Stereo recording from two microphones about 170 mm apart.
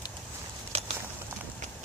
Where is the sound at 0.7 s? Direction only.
35° right (ahead or behind).